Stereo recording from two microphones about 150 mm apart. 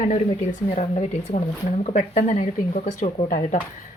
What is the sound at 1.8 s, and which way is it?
Speech, 50° left (ahead or behind).